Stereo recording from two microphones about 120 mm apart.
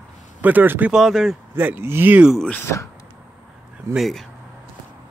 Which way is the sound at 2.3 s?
10° left (ahead or behind).